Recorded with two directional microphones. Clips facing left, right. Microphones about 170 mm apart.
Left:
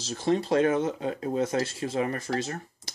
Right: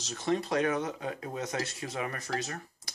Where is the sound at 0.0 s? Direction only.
30° left (ahead or behind).